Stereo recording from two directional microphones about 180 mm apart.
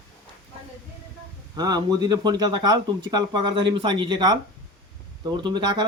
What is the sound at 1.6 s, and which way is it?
Speech, 20° right (ahead or behind).